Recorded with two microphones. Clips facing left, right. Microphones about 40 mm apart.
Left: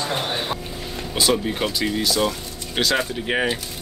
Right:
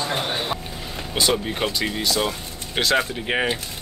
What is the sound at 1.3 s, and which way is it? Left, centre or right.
Speech, centre.